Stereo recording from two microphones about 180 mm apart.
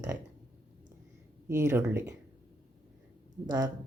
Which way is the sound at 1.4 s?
15° right (ahead or behind).